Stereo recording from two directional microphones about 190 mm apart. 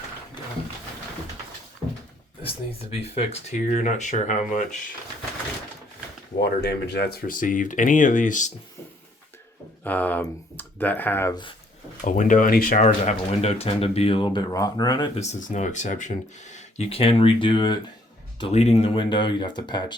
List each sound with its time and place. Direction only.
2.4 s speech: 30° left (ahead or behind)
6.4 s speech: 60° left (ahead or behind); by 8.5 s 40° left (ahead or behind)
9.8 s speech: 10° left (ahead or behind)
12.0 s speech: 40° left (ahead or behind); by 15.2 s 25° left (ahead or behind)
15.2 s speech: 40° left (ahead or behind); by 19.8 s 25° left (ahead or behind)